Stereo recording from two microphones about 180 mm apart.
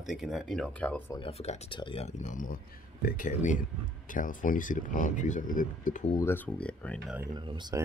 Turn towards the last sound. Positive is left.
turn(degrees=-25)  # may be behind; listen again after turning